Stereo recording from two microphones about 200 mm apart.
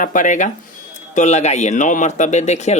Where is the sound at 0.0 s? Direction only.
40° left (ahead or behind).